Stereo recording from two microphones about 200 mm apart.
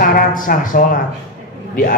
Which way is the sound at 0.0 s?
45° left (ahead or behind).